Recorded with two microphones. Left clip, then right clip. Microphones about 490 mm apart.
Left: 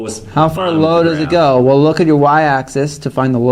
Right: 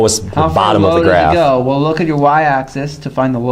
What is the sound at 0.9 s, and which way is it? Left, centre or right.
Speech, left.